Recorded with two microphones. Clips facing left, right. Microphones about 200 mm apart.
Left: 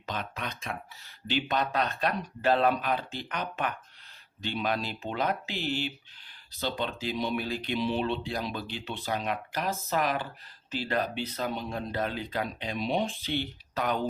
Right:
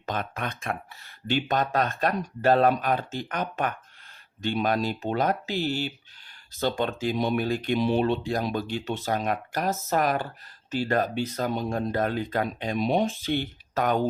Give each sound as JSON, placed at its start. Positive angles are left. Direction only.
{"t": 0.0, "sound": "speech", "side_deg": -50}